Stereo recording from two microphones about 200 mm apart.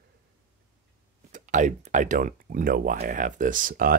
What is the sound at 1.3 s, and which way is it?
Speech, 40° right (ahead or behind).